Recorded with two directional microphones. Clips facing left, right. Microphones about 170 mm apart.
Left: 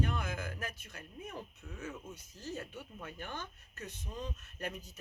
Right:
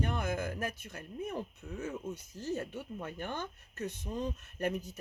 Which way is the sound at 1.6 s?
35° right (ahead or behind).